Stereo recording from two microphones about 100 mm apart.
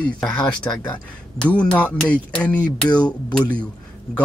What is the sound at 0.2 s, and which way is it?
Speech, 5° left (ahead or behind).